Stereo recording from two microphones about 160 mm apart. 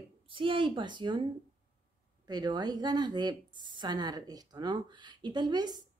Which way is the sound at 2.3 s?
25° right (ahead or behind).